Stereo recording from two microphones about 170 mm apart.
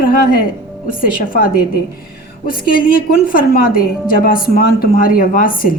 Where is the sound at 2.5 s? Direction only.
60° left (ahead or behind).